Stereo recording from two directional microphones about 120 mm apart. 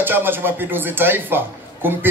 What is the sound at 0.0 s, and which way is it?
A man's voice, 15° right (ahead or behind).